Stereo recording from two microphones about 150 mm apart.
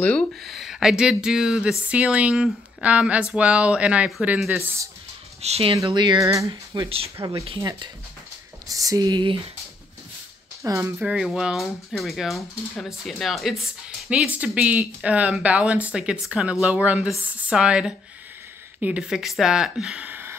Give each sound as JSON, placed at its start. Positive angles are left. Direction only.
{"t": 0.0, "sound": "speech", "side_deg": 5}
{"t": 5.4, "sound": "speech", "side_deg": -40}
{"t": 5.9, "sound": "speech", "side_deg": -30}
{"t": 8.6, "sound": "speech", "side_deg": -25}
{"t": 10.6, "sound": "speech", "side_deg": -20}
{"t": 11.0, "sound": "speech", "side_deg": -5}